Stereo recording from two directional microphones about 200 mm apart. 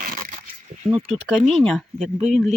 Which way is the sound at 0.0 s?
45° right (ahead or behind).